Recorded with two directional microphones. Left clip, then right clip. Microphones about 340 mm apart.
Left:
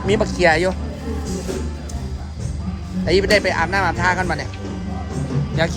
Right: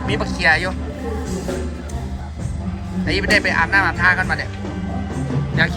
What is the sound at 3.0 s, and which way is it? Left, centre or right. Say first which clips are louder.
Speech: left 1 dB; centre.